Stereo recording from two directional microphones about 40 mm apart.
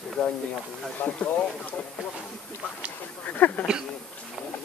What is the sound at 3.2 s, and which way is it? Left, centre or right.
Speech, left.